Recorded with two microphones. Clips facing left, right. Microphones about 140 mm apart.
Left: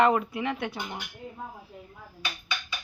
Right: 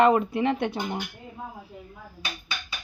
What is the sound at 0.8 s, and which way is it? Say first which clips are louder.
Speech: right 6 dB; 35° right (ahead or behind).